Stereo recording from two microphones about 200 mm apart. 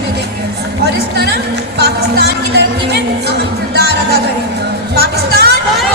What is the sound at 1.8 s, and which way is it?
Music, 55° right (ahead or behind).